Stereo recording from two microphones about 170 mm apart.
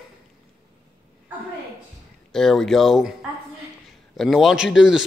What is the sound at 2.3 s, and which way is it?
Speech, centre (ahead or behind).